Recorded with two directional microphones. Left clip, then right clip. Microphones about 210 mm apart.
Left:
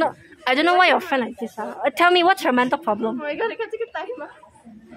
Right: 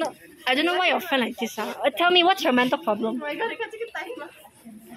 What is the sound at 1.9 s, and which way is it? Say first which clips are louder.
Speech: left 3 dB; 10° left (ahead or behind).